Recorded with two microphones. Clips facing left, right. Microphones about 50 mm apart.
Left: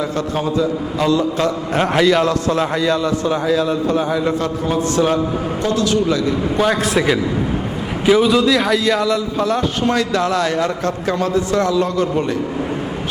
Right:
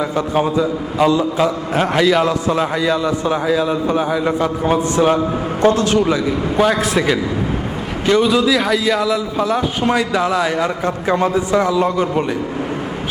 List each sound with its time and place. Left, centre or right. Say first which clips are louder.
0.0 s a man's voice: right 3 dB; centre
5.6 s a man's voice: right 4 dB; right
6.1 s a man's voice: even; centre
6.6 s a man's voice: right 2 dB; centre